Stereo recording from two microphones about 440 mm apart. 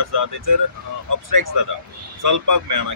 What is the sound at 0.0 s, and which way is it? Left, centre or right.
Speech, right.